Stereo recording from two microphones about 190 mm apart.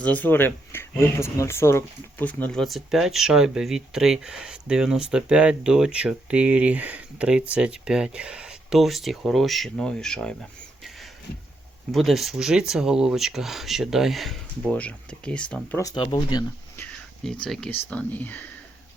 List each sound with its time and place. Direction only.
0.0 s speech: 10° left (ahead or behind)
11.9 s speech: centre (ahead or behind)
15.8 s speech: 20° left (ahead or behind)
16.7 s a sound: 10° left (ahead or behind)
17.4 s speech: 5° left (ahead or behind)